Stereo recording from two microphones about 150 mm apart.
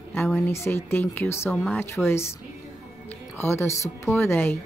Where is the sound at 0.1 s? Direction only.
15° left (ahead or behind).